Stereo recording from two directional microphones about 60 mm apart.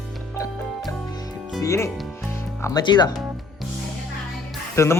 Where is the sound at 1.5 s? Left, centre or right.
Left.